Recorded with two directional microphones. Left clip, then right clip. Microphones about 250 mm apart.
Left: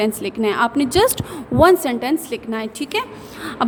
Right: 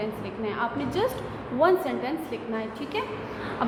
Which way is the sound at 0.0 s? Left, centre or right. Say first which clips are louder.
Left 11 dB; left.